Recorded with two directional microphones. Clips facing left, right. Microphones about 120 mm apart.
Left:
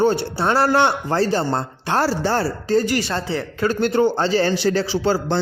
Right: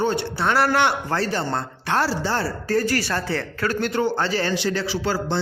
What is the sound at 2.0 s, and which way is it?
Speech, 45° left (ahead or behind).